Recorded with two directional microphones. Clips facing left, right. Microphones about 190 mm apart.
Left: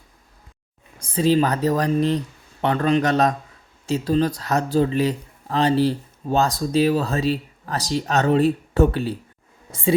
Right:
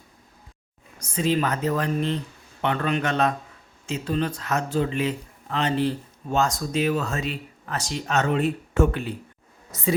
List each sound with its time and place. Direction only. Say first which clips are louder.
0.9 s speech: left 5 dB; 30° left (ahead or behind)